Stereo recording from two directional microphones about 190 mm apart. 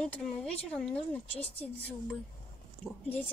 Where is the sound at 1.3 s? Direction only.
30° left (ahead or behind).